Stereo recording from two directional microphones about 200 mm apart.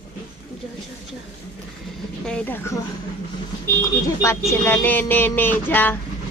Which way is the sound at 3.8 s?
20° left (ahead or behind).